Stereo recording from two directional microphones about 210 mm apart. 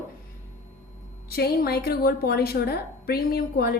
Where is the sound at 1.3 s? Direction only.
50° left (ahead or behind).